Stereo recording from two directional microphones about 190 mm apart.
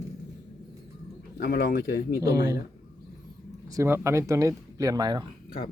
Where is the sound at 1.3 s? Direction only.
50° left (ahead or behind).